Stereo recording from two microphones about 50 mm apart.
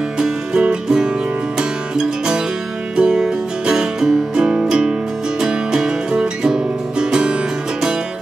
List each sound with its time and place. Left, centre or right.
0.2 s music: centre
3.0 s music: centre